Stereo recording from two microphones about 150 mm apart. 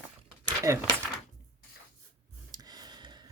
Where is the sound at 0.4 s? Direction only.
25° right (ahead or behind).